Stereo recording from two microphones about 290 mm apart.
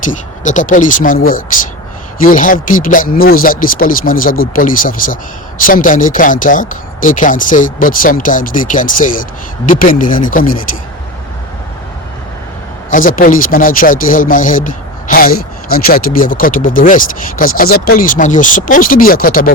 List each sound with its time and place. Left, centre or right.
0.0 s speech: left
12.9 s speech: left